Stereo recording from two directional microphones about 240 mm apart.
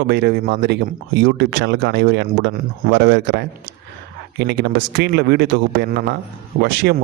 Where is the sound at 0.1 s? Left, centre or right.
Right.